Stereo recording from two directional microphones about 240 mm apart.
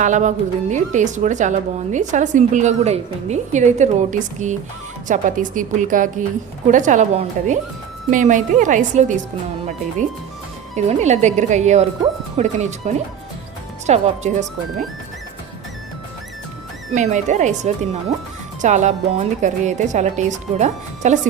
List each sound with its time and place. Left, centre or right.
0.0 s speech: right
10.8 s speech: right
16.9 s speech: right